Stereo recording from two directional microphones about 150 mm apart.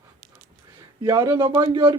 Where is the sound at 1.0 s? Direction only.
20° right (ahead or behind).